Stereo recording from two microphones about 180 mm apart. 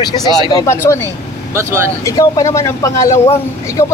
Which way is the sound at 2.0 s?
20° left (ahead or behind).